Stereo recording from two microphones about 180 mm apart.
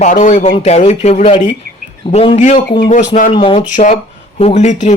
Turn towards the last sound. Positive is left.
turn(degrees=40)  # may be behind; listen again after turning